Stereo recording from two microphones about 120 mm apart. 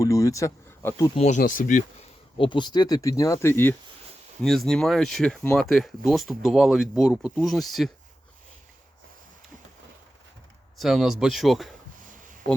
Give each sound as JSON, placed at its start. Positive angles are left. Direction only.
{"t": 0.0, "sound": "speech", "side_deg": 30}
{"t": 1.3, "sound": "speech", "side_deg": 90}
{"t": 2.4, "sound": "speech", "side_deg": 40}
{"t": 4.4, "sound": "speech", "side_deg": 5}
{"t": 10.8, "sound": "speech", "side_deg": 0}
{"t": 12.0, "sound": "a sound", "side_deg": -90}